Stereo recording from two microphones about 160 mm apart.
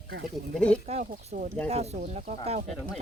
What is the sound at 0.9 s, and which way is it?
Speech, 50° right (ahead or behind).